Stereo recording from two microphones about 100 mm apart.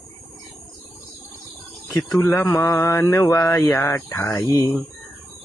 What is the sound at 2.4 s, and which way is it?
Mantra, 30° left (ahead or behind).